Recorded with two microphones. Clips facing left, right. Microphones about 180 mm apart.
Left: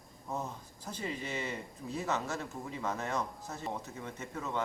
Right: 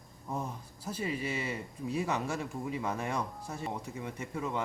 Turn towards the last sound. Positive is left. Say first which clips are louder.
# right 3 dB
turn(degrees=-10)  # may be behind; listen again after turning